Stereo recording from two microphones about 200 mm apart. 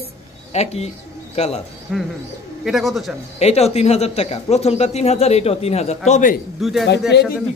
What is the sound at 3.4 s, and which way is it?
Speech, 30° left (ahead or behind).